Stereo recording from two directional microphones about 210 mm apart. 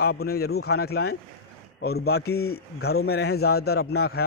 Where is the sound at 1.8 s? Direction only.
50° left (ahead or behind).